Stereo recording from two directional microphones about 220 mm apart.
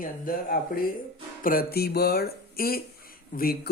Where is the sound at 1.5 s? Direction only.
45° left (ahead or behind).